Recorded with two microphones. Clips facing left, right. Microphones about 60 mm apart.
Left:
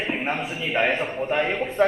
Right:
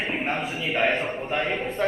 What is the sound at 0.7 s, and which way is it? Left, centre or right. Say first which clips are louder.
Speech: left 1 dB; left.